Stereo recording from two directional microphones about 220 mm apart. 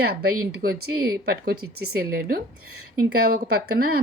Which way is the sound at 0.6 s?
45° right (ahead or behind).